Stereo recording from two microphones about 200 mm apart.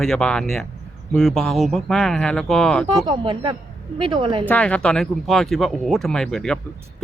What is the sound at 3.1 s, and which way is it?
A woman's voice, 25° right (ahead or behind).